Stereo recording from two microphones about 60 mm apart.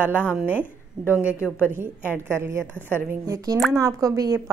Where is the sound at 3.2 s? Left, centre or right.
Right.